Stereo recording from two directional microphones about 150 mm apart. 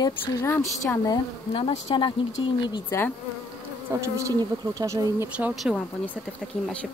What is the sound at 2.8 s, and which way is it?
Speech, 15° left (ahead or behind).